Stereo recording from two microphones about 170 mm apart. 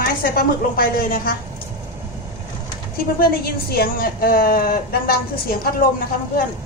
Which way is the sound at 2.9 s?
60° left (ahead or behind).